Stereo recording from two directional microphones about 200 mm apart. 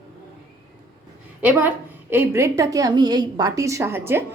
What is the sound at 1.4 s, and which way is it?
A woman's voice, 10° right (ahead or behind).